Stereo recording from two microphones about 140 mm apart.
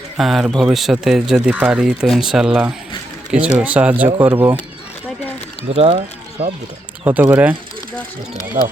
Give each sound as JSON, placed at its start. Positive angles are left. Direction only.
{"t": 0.2, "sound": "speech", "side_deg": 0}
{"t": 5.7, "sound": "speech", "side_deg": -45}
{"t": 7.0, "sound": "speech", "side_deg": -10}
{"t": 8.6, "sound": "speech", "side_deg": -60}